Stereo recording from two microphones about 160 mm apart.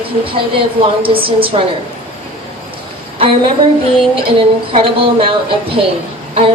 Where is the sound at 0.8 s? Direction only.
35° right (ahead or behind).